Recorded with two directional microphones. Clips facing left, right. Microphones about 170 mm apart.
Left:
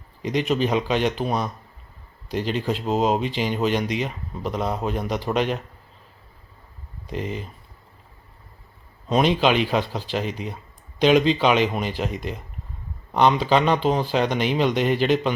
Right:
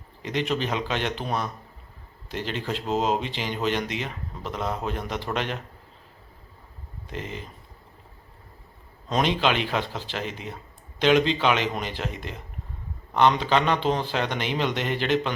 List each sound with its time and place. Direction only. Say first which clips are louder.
0.3 s a man's voice: left 5 dB; 15° left (ahead or behind)
7.1 s a man's voice: left 6 dB; 15° left (ahead or behind)
9.0 s a man's voice: left 4 dB; 10° left (ahead or behind)